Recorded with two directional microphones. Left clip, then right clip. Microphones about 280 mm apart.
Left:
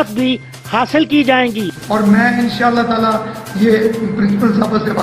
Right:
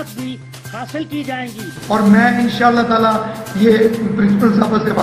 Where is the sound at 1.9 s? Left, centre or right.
Centre.